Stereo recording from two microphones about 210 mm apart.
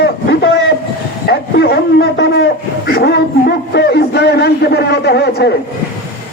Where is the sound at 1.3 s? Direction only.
50° left (ahead or behind).